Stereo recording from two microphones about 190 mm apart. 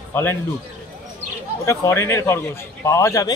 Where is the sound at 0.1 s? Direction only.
10° left (ahead or behind).